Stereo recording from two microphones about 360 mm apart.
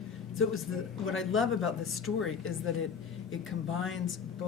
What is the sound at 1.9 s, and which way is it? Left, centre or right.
Speech, centre.